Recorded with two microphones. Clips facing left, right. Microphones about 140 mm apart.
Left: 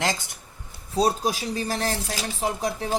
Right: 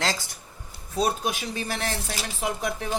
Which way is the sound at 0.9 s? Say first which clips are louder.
Left 3 dB; 35° left (ahead or behind).